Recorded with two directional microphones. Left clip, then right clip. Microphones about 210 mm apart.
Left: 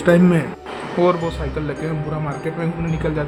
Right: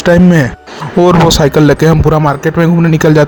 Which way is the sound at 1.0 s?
55° right (ahead or behind).